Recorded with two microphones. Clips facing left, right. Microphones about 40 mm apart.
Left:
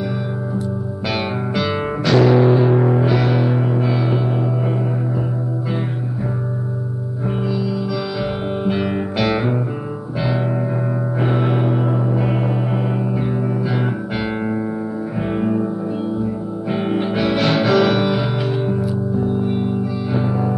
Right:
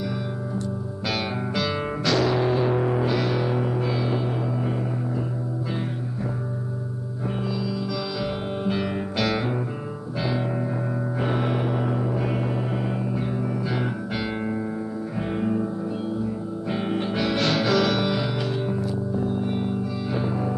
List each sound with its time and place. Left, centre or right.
1.1 s music: centre
7.4 s music: centre
11.1 s gong: centre
15.1 s music: centre
16.7 s music: centre